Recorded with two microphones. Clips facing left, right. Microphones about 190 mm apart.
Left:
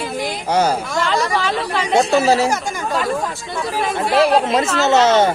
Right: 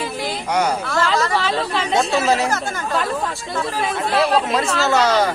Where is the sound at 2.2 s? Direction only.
30° left (ahead or behind).